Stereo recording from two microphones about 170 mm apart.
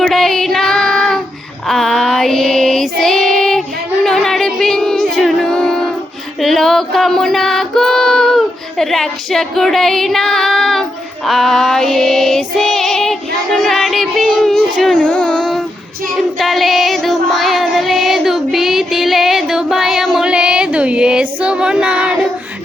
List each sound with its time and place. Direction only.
0.0 s child singing: centre (ahead or behind)
4.0 s music: centre (ahead or behind)
6.4 s female singing: centre (ahead or behind)
16.1 s music: centre (ahead or behind)